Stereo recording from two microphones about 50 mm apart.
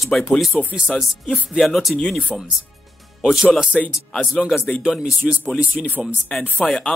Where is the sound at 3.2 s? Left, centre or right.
Centre.